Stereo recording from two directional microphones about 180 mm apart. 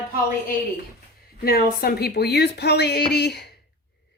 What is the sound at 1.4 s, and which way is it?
Speech, 55° left (ahead or behind).